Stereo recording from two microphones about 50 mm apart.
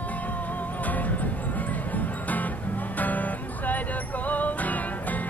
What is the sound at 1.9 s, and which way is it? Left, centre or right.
Music, left.